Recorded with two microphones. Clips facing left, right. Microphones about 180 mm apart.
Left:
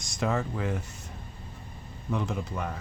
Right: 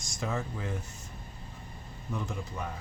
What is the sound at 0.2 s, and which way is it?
Speech, 65° left (ahead or behind).